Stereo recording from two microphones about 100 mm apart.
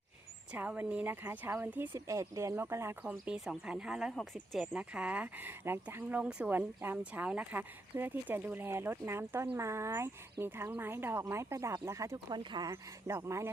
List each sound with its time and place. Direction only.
0.5 s speech: 15° right (ahead or behind)
2.0 s speech: 30° right (ahead or behind)
3.0 s speech: 10° right (ahead or behind)
4.7 s speech: 10° right (ahead or behind)
6.1 s speech: 10° right (ahead or behind); by 12.2 s 30° right (ahead or behind)
12.3 s speech: 45° right (ahead or behind)
12.7 s speech: 30° right (ahead or behind)